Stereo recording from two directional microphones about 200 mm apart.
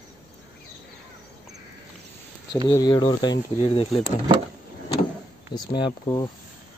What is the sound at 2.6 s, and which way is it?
Speech, 20° left (ahead or behind).